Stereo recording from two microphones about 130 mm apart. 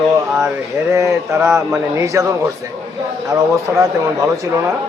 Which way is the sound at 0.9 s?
20° right (ahead or behind).